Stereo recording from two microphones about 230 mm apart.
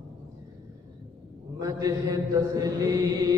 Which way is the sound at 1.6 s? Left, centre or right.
Centre.